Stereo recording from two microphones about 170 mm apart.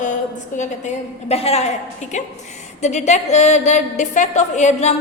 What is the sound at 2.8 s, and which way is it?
A woman's voice, 45° left (ahead or behind).